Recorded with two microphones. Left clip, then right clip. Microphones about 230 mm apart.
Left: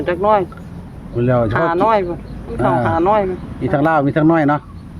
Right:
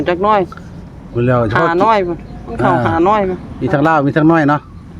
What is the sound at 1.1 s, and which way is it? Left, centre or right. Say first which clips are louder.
Speech: right 2 dB; centre.